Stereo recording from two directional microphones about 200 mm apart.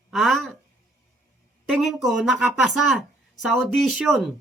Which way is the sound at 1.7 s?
Centre (ahead or behind).